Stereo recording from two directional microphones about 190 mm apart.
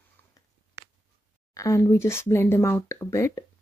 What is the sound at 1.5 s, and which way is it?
Speech, 15° left (ahead or behind).